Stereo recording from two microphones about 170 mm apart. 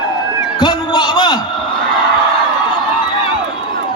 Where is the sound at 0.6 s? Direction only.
25° left (ahead or behind).